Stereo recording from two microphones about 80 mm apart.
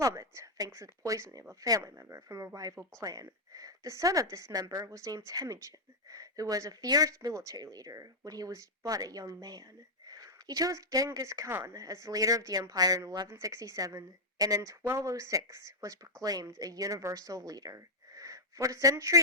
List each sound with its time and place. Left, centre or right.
0.0 s speech: right
1.8 s speech: right
2.6 s speech: right